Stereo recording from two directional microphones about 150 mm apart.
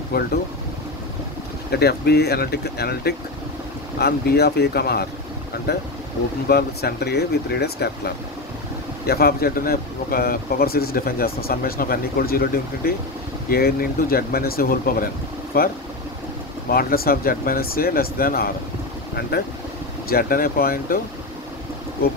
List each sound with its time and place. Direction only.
0.1 s speech: 90° left
1.7 s speech: 90° left
9.0 s speech: 90° left